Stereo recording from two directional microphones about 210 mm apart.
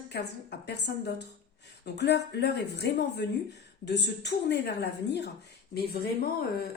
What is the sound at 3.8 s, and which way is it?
A woman's voice, 55° left (ahead or behind).